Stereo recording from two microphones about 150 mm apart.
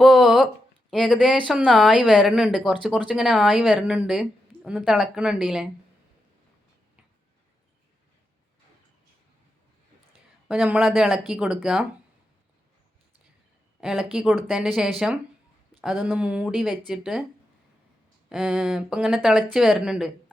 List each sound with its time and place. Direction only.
0.0 s a sound: centre (ahead or behind)
0.9 s a woman's voice: 5° right (ahead or behind)
10.5 s speech: 5° right (ahead or behind)
13.8 s speech: 5° right (ahead or behind)
18.3 s speech: 5° right (ahead or behind)